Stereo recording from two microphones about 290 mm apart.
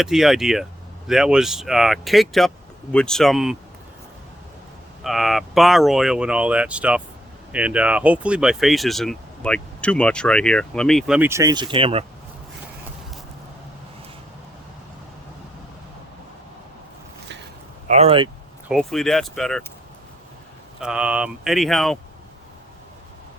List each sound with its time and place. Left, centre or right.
0.0 s speech: centre
5.0 s speech: centre
17.8 s speech: right
18.7 s speech: centre
20.8 s speech: centre